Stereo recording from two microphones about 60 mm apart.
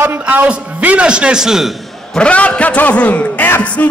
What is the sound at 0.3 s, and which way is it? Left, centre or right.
A man's voice, right.